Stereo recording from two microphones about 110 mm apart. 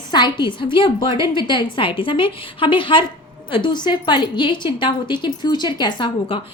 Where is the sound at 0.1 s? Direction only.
45° left (ahead or behind).